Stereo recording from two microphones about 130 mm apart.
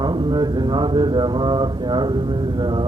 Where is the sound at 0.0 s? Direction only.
35° right (ahead or behind).